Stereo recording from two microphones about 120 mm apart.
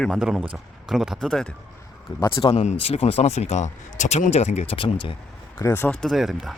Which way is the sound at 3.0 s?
60° left (ahead or behind).